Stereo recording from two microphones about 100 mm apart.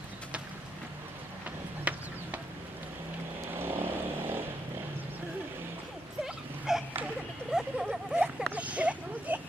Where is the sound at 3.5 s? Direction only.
20° right (ahead or behind).